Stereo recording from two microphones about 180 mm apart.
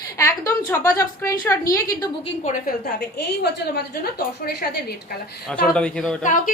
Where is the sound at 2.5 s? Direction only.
55° left (ahead or behind).